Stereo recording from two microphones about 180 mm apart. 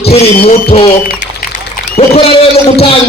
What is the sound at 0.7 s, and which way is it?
Speech, 35° left (ahead or behind).